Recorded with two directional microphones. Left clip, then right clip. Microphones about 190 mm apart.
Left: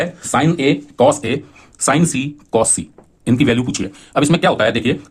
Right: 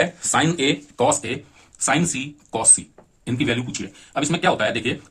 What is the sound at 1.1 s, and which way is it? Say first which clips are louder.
Speech: left 6 dB; 40° left (ahead or behind).